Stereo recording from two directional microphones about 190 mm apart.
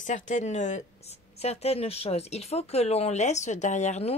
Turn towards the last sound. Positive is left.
turn(degrees=35)  # may be behind; listen again after turning